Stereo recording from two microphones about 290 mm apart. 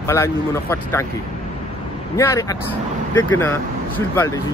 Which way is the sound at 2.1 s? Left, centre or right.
Centre.